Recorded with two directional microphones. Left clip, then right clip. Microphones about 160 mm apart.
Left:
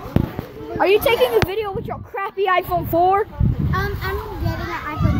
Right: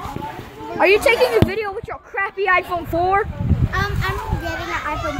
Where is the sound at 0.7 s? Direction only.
10° right (ahead or behind).